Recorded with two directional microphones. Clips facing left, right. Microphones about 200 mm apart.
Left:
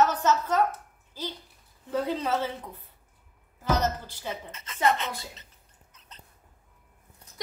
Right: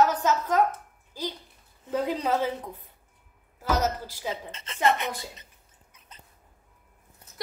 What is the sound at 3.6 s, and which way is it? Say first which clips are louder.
Speech: even; 10° right (ahead or behind).